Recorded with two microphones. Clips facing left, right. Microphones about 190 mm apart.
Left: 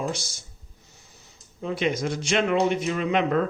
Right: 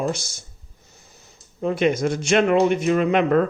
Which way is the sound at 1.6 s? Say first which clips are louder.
Right 6 dB; 50° right (ahead or behind).